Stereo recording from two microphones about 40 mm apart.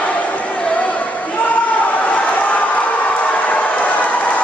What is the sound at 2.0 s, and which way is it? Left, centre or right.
Crowd, left.